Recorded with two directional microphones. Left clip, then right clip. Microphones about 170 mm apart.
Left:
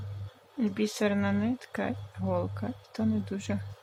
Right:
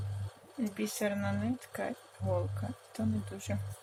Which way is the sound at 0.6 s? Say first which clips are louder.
Left 5 dB; 25° left (ahead or behind).